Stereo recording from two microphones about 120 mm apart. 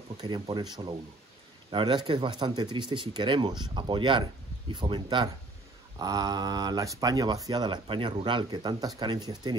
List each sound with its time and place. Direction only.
0.2 s speech: 40° right (ahead or behind)